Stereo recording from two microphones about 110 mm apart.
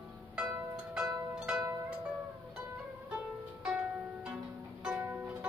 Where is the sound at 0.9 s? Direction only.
5° right (ahead or behind).